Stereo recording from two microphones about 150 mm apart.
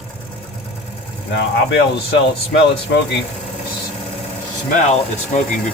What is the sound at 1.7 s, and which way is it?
Speech, 90° left.